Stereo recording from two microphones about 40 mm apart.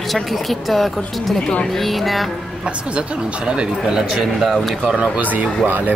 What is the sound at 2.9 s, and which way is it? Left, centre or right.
Speech, right.